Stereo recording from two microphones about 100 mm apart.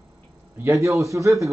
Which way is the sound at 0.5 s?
25° right (ahead or behind).